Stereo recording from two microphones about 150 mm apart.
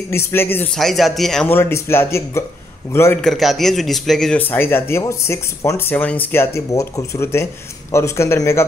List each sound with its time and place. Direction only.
0.1 s speech: 15° left (ahead or behind)
0.7 s speech: centre (ahead or behind)
1.5 s speech: 15° left (ahead or behind)
3.2 s speech: centre (ahead or behind); by 8.6 s 15° left (ahead or behind)